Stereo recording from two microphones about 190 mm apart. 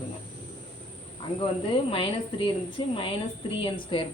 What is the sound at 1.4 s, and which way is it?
A woman's voice, 30° left (ahead or behind).